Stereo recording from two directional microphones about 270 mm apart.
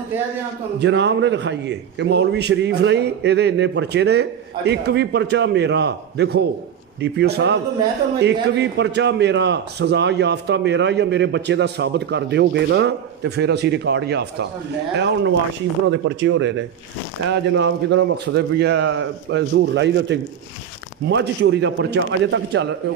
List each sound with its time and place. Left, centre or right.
0.7 s a man's voice: right